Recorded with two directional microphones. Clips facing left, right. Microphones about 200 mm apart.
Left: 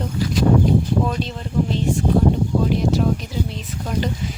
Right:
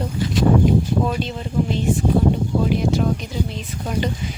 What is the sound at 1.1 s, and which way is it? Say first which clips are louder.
Speech: right 1 dB; 5° right (ahead or behind).